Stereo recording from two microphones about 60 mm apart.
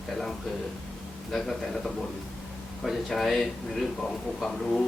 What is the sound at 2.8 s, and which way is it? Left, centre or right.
Speech, centre.